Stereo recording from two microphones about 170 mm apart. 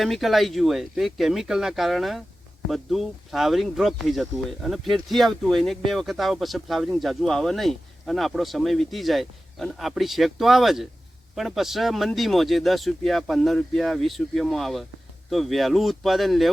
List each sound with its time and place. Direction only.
0.0 s speech: centre (ahead or behind)